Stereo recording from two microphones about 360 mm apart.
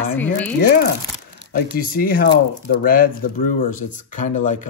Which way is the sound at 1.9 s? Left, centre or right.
Left.